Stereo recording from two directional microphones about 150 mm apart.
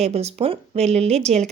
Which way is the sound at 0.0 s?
45° right (ahead or behind).